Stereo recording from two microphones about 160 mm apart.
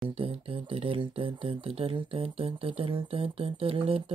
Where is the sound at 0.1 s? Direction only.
35° right (ahead or behind).